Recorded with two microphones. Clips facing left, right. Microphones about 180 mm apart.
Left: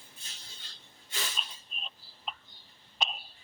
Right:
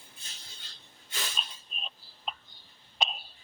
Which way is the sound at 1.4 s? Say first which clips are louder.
Right 2 dB; 20° right (ahead or behind).